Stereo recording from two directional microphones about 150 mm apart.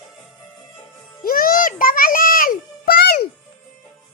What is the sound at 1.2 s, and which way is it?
Music, 70° left (ahead or behind).